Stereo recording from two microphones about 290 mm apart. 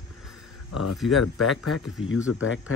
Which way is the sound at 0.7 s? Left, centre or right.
Left.